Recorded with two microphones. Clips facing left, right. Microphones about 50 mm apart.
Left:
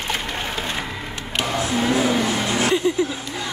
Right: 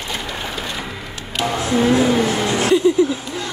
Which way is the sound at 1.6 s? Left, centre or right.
Centre.